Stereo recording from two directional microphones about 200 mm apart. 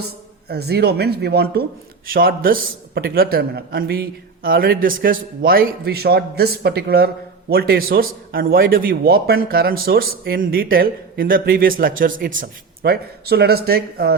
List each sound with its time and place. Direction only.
0.4 s a man's voice: 55° right (ahead or behind)